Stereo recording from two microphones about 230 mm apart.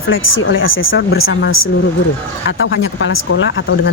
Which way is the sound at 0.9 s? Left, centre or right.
Left.